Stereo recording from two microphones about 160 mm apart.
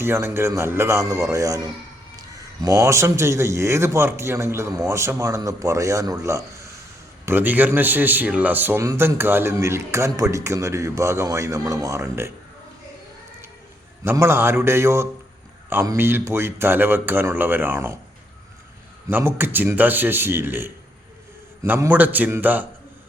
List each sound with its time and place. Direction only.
0.0 s a man's voice: 15° right (ahead or behind)
14.0 s a man's voice: 15° right (ahead or behind)
19.0 s a man's voice: 15° right (ahead or behind)